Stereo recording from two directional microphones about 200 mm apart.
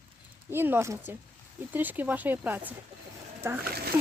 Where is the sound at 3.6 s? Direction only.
50° right (ahead or behind).